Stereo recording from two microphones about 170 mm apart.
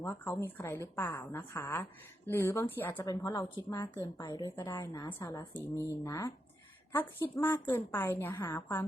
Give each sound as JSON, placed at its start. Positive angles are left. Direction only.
{"t": 0.0, "sound": "a woman's voice", "side_deg": 15}